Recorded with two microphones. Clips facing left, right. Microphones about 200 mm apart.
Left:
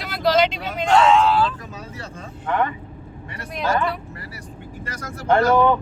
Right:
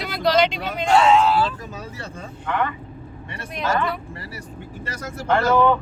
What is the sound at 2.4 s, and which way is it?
Speech, 45° left (ahead or behind).